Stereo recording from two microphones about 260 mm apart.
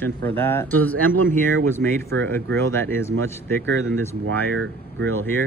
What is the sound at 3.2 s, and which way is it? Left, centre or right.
Speech, right.